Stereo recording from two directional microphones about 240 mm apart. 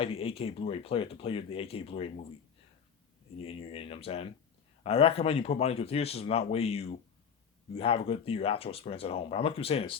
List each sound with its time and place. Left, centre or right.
0.0 s speech: left
3.3 s speech: left